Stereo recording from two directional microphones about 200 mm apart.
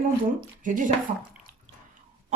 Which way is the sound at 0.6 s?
40° right (ahead or behind).